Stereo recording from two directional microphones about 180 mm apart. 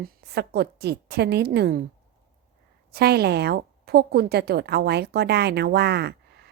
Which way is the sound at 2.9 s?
60° right (ahead or behind).